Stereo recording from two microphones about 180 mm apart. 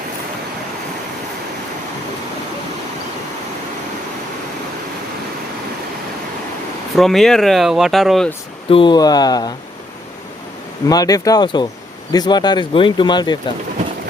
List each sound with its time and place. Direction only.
6.9 s speech: centre (ahead or behind)
8.7 s speech: 25° left (ahead or behind)
10.8 s speech: 20° left (ahead or behind)